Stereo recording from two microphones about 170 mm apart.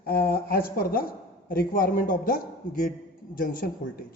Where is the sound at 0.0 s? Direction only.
60° left (ahead or behind).